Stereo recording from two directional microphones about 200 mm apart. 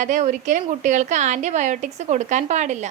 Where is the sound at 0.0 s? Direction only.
40° right (ahead or behind).